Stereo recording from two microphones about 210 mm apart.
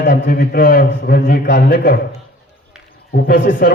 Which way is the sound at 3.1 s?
45° left (ahead or behind).